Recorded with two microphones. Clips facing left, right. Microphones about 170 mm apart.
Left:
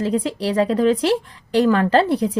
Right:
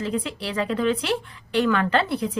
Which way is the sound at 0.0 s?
40° left (ahead or behind).